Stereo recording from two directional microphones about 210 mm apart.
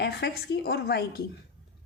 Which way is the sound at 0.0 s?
50° left (ahead or behind).